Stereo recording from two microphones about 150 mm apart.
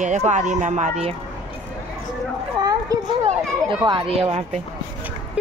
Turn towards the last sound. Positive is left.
turn(degrees=-30)  # may be behind; listen again after turning